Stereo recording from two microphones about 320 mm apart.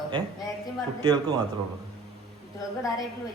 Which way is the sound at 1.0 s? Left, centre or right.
Centre.